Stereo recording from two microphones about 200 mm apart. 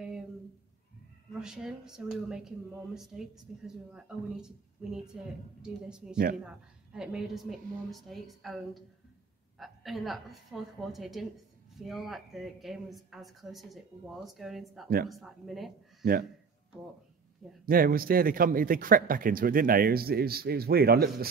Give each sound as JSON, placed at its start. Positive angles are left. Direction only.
{"t": 1.4, "sound": "speech", "side_deg": -5}
{"t": 16.0, "sound": "speech", "side_deg": -45}
{"t": 17.6, "sound": "speech", "side_deg": -45}